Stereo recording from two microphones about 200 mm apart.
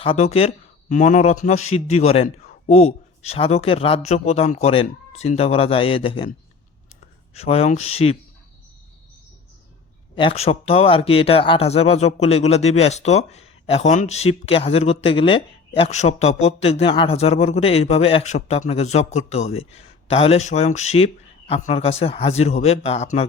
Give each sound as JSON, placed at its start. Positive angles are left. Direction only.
{"t": 0.0, "sound": "a man's voice", "side_deg": 30}
{"t": 7.3, "sound": "speech", "side_deg": 30}
{"t": 10.2, "sound": "speech", "side_deg": 30}